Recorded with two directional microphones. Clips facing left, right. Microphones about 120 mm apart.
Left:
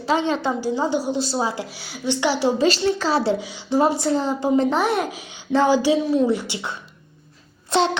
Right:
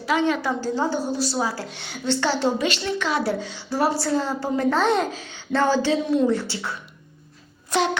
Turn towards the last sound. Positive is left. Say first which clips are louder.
# left 3 dB
turn(degrees=25)  # may be behind; listen again after turning